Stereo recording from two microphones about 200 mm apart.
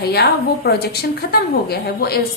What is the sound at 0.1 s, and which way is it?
A woman's voice, 55° left (ahead or behind).